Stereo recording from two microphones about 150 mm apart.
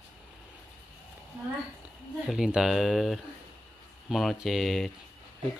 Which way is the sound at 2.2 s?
5° right (ahead or behind).